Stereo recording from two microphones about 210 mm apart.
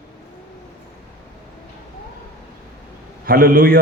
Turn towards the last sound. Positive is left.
turn(degrees=-45)  # may be behind; listen again after turning